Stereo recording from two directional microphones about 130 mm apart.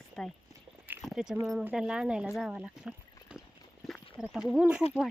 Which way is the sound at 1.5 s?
5° right (ahead or behind).